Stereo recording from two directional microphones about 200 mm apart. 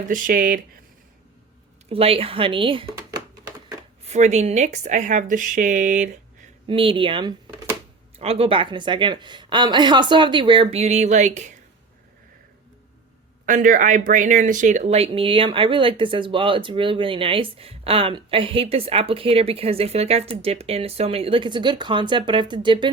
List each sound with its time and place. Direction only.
0.1 s speech: 45° right (ahead or behind)
1.9 s speech: 30° right (ahead or behind)
6.7 s speech: 25° right (ahead or behind)
13.4 s speech: 40° right (ahead or behind); by 22.9 s 25° right (ahead or behind)